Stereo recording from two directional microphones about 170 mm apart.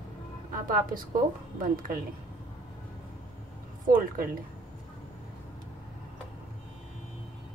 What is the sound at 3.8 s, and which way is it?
Speech, 55° right (ahead or behind).